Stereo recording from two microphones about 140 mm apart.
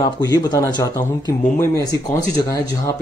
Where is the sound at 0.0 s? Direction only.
25° left (ahead or behind).